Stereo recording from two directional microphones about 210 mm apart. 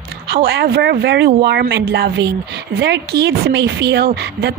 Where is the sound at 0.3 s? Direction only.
50° right (ahead or behind).